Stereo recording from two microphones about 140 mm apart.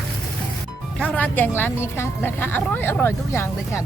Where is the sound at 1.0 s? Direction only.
10° left (ahead or behind).